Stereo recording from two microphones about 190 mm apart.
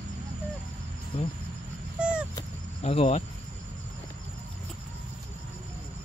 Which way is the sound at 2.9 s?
30° left (ahead or behind).